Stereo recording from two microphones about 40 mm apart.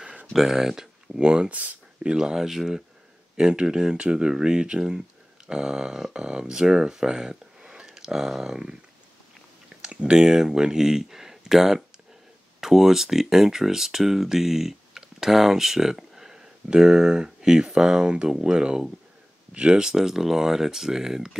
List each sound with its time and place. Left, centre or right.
0.3 s speech: centre
1.5 s speech: right
2.0 s speech: centre
3.3 s speech: right
9.8 s clicking: right
10.1 s speech: centre
19.9 s speech: centre